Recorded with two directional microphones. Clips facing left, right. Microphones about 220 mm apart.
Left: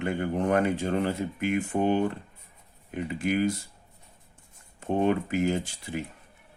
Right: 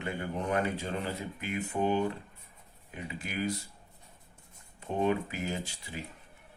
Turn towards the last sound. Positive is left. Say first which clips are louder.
# left 7 dB
turn(degrees=50)  # may be behind; listen again after turning